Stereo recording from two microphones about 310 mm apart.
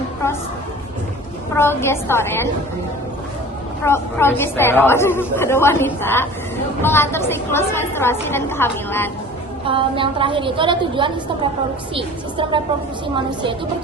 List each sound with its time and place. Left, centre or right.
1.5 s a woman's voice: centre
3.8 s a woman's voice: centre
9.6 s a woman's voice: centre